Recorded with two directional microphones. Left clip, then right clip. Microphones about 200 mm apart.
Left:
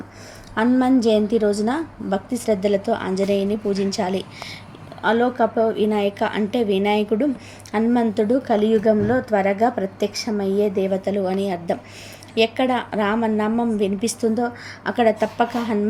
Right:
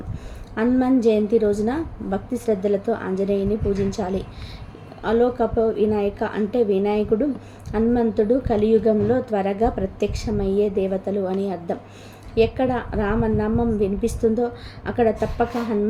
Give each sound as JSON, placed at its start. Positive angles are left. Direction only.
{"t": 0.5, "sound": "a woman's voice", "side_deg": 15}